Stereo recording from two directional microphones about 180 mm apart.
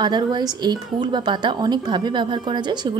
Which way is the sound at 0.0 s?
25° right (ahead or behind).